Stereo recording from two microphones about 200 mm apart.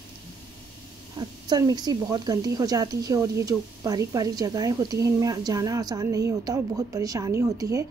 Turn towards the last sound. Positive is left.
turn(degrees=-15)  # may be behind; listen again after turning